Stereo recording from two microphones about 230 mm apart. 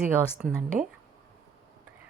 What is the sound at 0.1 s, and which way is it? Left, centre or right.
Speech, centre.